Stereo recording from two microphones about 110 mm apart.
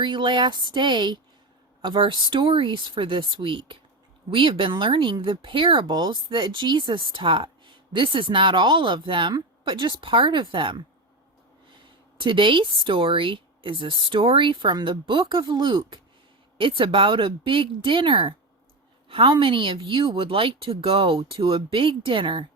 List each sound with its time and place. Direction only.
0.0 s speech: 45° right (ahead or behind)
12.2 s speech: 50° right (ahead or behind)